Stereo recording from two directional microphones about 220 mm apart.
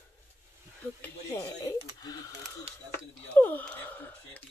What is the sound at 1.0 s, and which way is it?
Speech, 10° left (ahead or behind).